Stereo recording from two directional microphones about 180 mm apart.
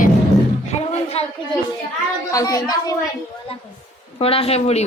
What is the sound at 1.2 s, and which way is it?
Speech, 35° left (ahead or behind).